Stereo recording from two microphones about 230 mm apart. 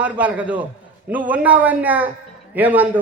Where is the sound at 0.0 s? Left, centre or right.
Centre.